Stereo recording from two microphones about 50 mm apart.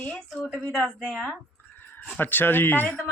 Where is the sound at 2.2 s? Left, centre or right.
Left.